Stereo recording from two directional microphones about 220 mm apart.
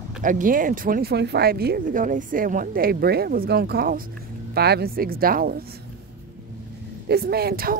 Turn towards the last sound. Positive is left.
turn(degrees=-45)  # may be behind; listen again after turning